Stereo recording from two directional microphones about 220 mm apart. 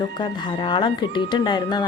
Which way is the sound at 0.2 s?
20° left (ahead or behind).